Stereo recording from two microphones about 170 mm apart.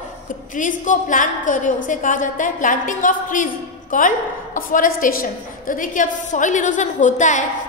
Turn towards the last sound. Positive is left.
turn(degrees=45)  # may be behind; listen again after turning